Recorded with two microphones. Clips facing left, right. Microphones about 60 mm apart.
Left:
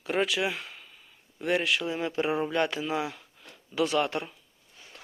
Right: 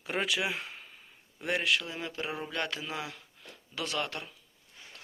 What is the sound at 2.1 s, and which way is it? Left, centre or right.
Speech, left.